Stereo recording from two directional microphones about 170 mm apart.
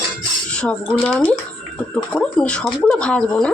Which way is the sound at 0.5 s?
5° left (ahead or behind).